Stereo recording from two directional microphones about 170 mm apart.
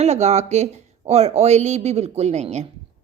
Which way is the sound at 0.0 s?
40° right (ahead or behind).